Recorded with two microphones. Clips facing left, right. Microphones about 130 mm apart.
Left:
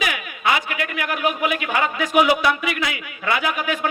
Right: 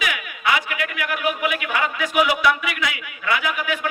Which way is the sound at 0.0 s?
30° left (ahead or behind).